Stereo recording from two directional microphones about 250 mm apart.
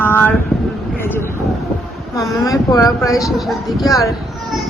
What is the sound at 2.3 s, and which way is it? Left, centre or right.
Speech, centre.